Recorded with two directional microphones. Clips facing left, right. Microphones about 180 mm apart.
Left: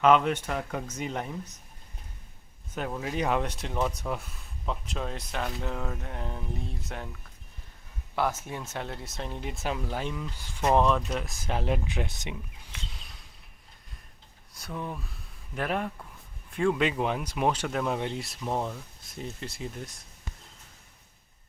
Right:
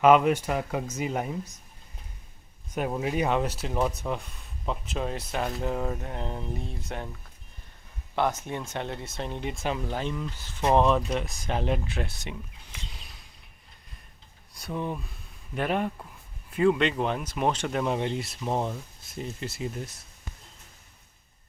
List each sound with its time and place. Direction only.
0.0 s speech: 10° right (ahead or behind)
2.7 s speech: 15° right (ahead or behind)
3.2 s speech: 5° right (ahead or behind)
5.4 s speech: 15° right (ahead or behind)
6.5 s speech: centre (ahead or behind)
8.1 s speech: 5° left (ahead or behind)
10.7 s speech: centre (ahead or behind)
11.9 s speech: 15° left (ahead or behind)
12.9 s a sound: centre (ahead or behind)
15.5 s speech: centre (ahead or behind)